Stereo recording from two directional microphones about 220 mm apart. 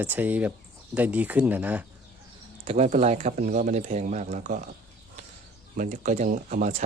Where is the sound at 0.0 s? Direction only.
10° right (ahead or behind).